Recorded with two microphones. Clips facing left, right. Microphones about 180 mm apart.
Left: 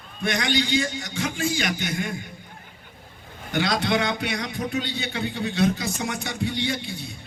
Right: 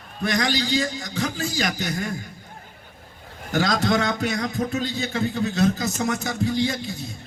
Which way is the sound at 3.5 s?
40° right (ahead or behind).